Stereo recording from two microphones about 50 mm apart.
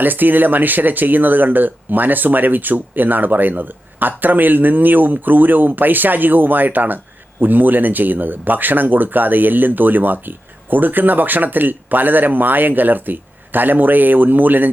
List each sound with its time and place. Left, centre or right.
0.0 s speech: right